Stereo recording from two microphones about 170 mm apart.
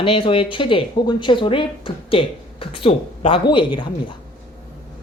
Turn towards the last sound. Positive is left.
turn(degrees=30)  # may be behind; listen again after turning